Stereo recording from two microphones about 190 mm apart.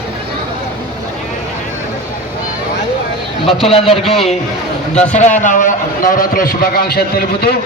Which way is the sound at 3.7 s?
30° left (ahead or behind).